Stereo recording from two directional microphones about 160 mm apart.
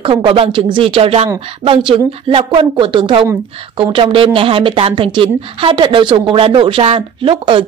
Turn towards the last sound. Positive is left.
turn(degrees=-35)  # may be behind; listen again after turning